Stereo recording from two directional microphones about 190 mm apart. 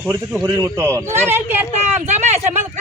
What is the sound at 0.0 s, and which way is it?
Speech, 10° right (ahead or behind).